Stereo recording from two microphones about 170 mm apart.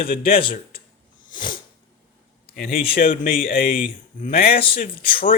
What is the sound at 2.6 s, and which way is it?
Speech, 60° left (ahead or behind).